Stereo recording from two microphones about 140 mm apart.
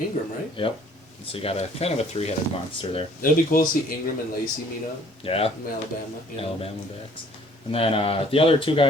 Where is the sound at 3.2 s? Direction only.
80° left.